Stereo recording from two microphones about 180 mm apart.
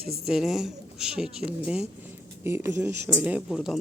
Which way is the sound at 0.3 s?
Centre (ahead or behind).